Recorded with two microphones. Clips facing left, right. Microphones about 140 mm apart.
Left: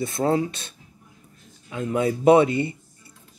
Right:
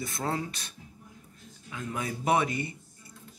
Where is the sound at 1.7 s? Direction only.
25° left (ahead or behind).